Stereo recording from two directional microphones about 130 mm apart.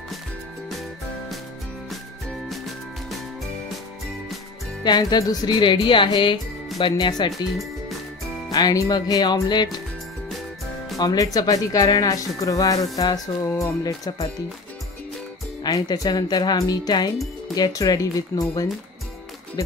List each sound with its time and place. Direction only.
4.8 s speech: 30° left (ahead or behind)
8.5 s speech: 30° left (ahead or behind)
11.0 s speech: 30° left (ahead or behind)
15.6 s speech: 30° left (ahead or behind)